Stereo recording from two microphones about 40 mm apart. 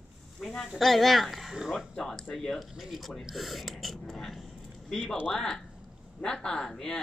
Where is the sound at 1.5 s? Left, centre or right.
Centre.